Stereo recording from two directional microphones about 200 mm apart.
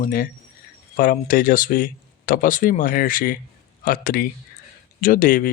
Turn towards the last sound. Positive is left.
turn(degrees=45)  # may be behind; listen again after turning